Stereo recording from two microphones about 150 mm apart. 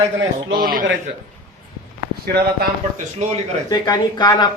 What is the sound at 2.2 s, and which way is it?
Speech, 90° right.